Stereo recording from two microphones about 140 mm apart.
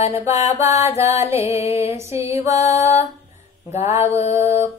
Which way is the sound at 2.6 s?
50° left (ahead or behind).